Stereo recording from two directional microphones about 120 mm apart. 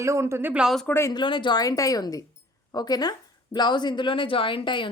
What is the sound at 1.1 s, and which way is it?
A woman's voice, 40° left (ahead or behind).